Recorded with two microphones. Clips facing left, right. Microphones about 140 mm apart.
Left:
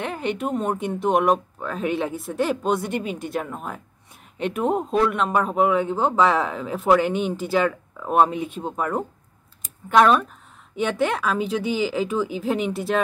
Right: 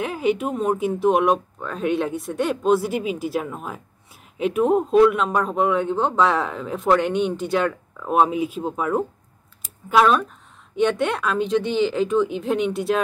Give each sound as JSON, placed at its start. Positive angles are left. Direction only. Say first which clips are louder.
{"t": 0.0, "sound": "speech", "louder": "right 4 dB", "side_deg": -5}